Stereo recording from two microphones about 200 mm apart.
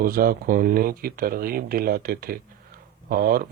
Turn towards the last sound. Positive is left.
turn(degrees=-45)  # may be behind; listen again after turning